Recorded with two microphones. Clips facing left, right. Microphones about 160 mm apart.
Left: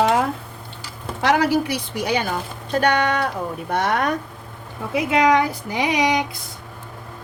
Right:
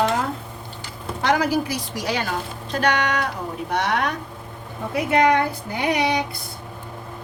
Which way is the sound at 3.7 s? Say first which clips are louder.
Left 2 dB; 50° left (ahead or behind).